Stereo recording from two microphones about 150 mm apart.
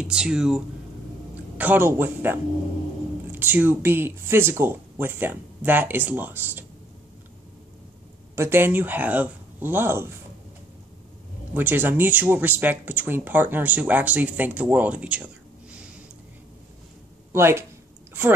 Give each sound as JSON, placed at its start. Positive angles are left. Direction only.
{"t": 0.0, "sound": "speech", "side_deg": -5}
{"t": 8.4, "sound": "speech", "side_deg": -15}
{"t": 11.5, "sound": "speech", "side_deg": -10}
{"t": 17.3, "sound": "speech", "side_deg": -15}